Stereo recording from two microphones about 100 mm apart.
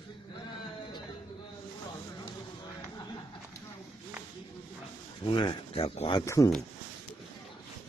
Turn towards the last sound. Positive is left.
turn(degrees=30)  # may be behind; listen again after turning